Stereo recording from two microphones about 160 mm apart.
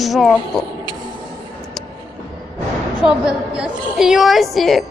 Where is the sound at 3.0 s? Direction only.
5° right (ahead or behind).